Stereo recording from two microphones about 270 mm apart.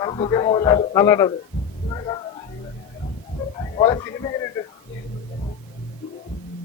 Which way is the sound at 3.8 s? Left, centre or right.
Centre.